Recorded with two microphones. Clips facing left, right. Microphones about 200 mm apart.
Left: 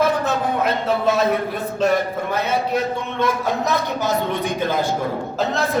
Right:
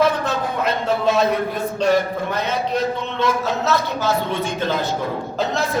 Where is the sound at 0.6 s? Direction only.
Centre (ahead or behind).